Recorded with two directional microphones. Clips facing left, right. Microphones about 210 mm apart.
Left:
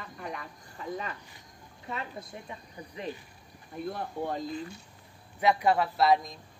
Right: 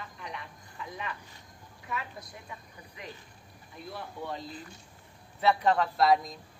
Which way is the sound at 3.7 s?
50° left (ahead or behind).